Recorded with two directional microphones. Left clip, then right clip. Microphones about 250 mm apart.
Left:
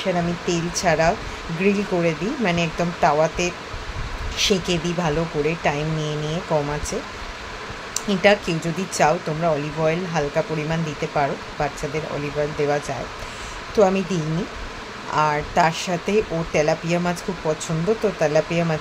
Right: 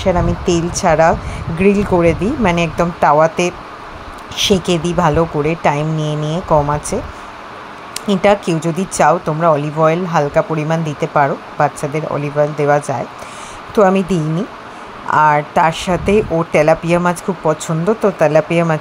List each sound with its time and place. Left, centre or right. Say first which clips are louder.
0.0 s speech: right 8 dB; right
8.1 s speech: right 5 dB; right